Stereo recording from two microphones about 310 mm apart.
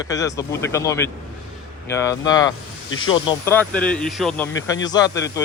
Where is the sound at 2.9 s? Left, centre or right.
Left.